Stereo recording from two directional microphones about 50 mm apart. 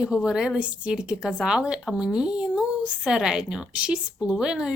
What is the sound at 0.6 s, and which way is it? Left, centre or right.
A woman's voice, right.